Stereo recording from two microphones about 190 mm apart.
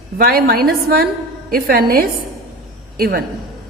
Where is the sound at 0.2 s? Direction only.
55° right (ahead or behind).